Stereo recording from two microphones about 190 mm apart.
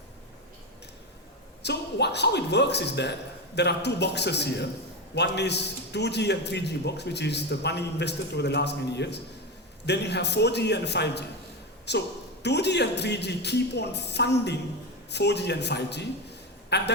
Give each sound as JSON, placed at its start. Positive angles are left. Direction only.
{"t": 1.6, "sound": "a man's voice", "side_deg": 60}